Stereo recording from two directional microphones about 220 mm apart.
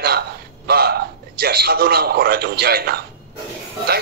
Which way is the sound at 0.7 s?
45° right (ahead or behind).